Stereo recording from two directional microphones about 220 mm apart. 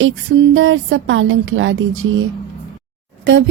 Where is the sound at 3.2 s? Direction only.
55° right (ahead or behind).